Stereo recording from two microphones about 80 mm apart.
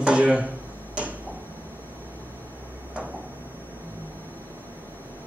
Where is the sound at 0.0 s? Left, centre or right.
Centre.